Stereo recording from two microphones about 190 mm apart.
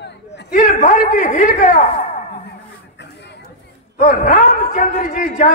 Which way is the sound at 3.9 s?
45° left (ahead or behind).